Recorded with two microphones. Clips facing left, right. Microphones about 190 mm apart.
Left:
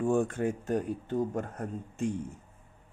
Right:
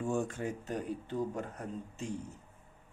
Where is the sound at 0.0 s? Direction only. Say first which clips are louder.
Left 6 dB; 55° left (ahead or behind).